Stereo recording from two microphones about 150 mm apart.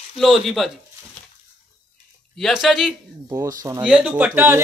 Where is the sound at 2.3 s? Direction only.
Centre (ahead or behind).